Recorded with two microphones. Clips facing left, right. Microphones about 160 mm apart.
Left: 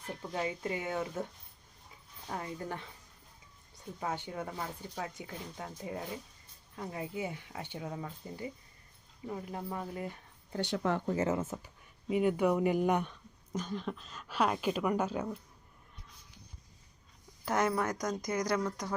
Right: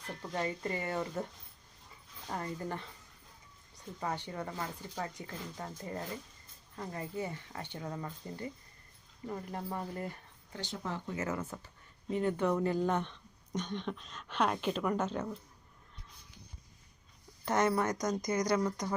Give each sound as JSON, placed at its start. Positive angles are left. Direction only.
{"t": 0.2, "sound": "speech", "side_deg": 5}
{"t": 2.3, "sound": "speech", "side_deg": 0}
{"t": 4.0, "sound": "speech", "side_deg": 5}
{"t": 10.6, "sound": "speech", "side_deg": 65}
{"t": 11.0, "sound": "speech", "side_deg": 35}
{"t": 12.0, "sound": "speech", "side_deg": 10}
{"t": 17.4, "sound": "speech", "side_deg": 5}